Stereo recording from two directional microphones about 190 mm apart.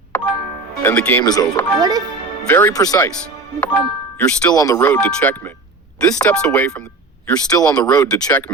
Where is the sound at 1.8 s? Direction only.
20° right (ahead or behind).